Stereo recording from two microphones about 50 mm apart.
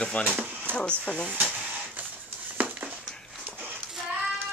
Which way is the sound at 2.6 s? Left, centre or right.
Right.